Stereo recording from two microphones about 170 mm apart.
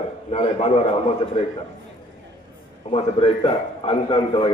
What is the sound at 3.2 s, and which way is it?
A man's voice, 30° left (ahead or behind).